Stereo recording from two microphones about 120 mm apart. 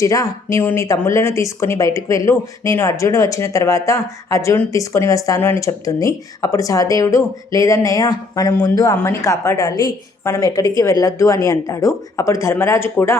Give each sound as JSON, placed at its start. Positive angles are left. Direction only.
{"t": 0.0, "sound": "speech", "side_deg": 30}